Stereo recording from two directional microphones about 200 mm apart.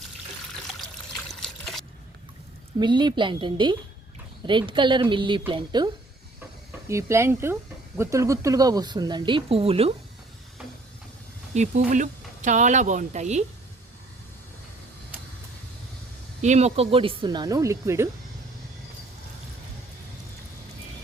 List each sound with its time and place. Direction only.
0.7 s trickle: centre (ahead or behind)
2.7 s speech: 20° right (ahead or behind)
11.5 s speech: 35° right (ahead or behind)
16.4 s speech: 35° right (ahead or behind); by 18.1 s 15° right (ahead or behind)